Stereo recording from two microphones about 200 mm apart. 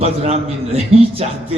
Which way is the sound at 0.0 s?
30° right (ahead or behind).